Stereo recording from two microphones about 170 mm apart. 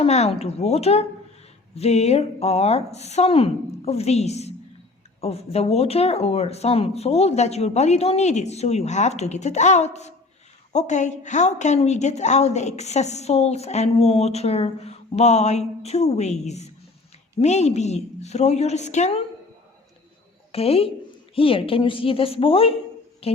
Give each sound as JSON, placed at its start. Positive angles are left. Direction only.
{"t": 0.0, "sound": "a woman's voice", "side_deg": 40}
{"t": 20.5, "sound": "a woman's voice", "side_deg": 35}